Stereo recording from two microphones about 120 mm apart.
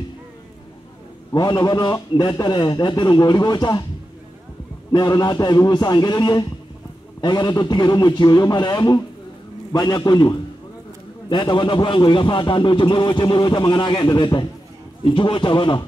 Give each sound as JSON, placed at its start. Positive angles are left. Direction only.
{"t": 1.3, "sound": "a man's voice", "side_deg": 35}
{"t": 4.9, "sound": "a man's voice", "side_deg": 35}